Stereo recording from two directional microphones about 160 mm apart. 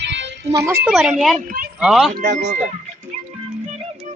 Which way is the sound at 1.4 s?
60° right (ahead or behind).